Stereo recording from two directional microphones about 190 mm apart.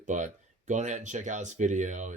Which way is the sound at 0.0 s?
40° right (ahead or behind).